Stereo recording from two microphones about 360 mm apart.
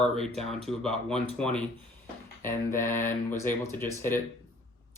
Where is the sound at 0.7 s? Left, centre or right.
Centre.